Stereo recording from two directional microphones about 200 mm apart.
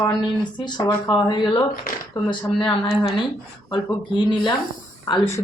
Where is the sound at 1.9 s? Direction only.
50° left (ahead or behind).